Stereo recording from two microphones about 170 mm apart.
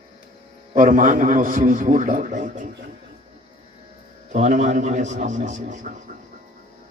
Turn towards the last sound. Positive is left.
turn(degrees=-45)  # may be behind; listen again after turning